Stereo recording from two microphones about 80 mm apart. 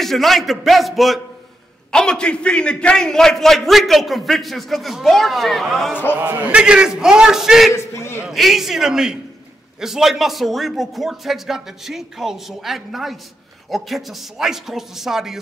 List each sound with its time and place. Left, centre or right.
0.0 s a man's voice: centre
6.1 s a man's voice: right; by 7.7 s centre
7.7 s a man's voice: left
8.3 s a man's voice: centre